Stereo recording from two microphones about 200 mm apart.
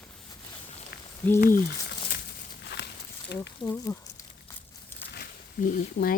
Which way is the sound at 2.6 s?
55° left (ahead or behind).